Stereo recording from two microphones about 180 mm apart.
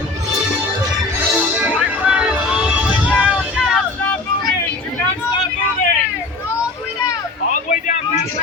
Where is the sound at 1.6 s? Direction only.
5° right (ahead or behind).